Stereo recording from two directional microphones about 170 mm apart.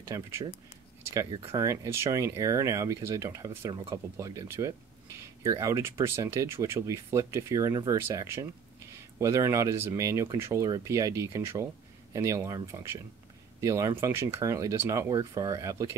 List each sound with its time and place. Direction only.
0.1 s speech: 15° right (ahead or behind)